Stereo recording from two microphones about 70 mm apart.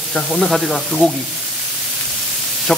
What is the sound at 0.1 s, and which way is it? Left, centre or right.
Speech, centre.